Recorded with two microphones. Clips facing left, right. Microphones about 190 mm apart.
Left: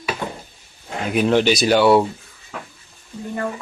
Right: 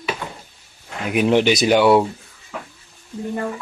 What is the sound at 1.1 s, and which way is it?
Speech, 15° right (ahead or behind).